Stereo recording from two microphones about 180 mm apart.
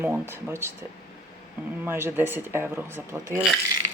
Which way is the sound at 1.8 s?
10° right (ahead or behind).